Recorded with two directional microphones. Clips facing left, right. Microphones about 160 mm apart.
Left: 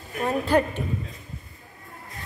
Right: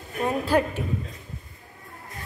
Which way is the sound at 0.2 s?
5° right (ahead or behind).